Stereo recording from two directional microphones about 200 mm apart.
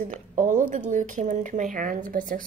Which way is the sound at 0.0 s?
40° right (ahead or behind).